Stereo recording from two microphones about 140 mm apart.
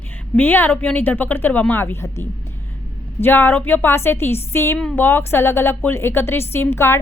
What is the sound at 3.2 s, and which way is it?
A woman's voice, 15° left (ahead or behind).